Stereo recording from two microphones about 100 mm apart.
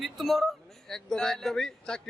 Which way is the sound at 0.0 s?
Centre (ahead or behind).